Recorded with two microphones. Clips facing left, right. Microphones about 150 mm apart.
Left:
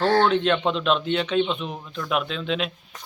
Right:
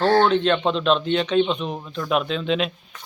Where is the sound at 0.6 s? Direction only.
30° right (ahead or behind).